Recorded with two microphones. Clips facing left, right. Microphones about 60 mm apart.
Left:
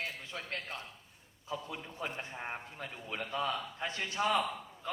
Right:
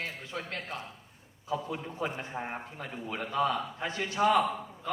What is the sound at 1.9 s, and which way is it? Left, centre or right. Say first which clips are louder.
A man's voice: right 4 dB; right.